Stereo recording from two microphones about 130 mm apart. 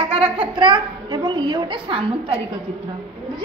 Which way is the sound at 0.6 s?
30° right (ahead or behind).